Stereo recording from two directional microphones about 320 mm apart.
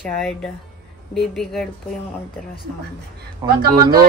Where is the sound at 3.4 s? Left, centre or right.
Right.